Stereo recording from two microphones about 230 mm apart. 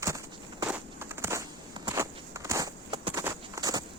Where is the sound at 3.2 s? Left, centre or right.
Centre.